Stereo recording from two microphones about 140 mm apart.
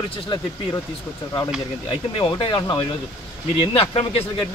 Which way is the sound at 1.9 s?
35° left (ahead or behind).